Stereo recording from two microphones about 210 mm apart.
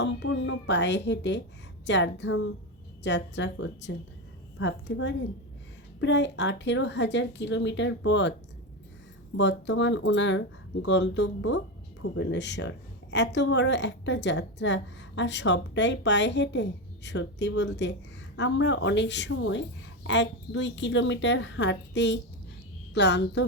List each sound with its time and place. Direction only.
0.0 s a woman's voice: 55° left (ahead or behind)
9.4 s a woman's voice: 55° left (ahead or behind)